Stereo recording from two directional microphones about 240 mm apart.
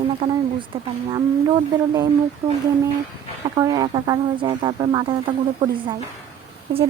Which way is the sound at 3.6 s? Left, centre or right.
Centre.